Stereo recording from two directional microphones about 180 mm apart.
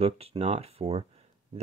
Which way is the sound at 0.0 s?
35° right (ahead or behind).